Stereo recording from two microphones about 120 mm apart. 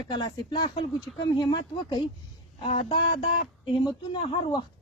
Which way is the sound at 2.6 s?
55° left (ahead or behind).